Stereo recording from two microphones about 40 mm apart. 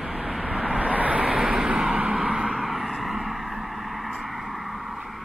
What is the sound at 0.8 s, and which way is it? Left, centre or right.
Vehicle, right.